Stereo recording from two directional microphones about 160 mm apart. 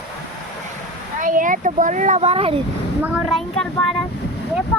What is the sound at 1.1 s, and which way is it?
Speech, 55° right (ahead or behind).